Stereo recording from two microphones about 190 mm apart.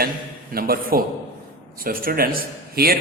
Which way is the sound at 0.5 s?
50° right (ahead or behind).